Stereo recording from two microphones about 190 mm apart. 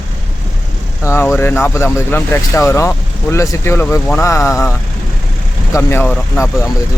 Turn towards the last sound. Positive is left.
turn(degrees=10)  # may be behind; listen again after turning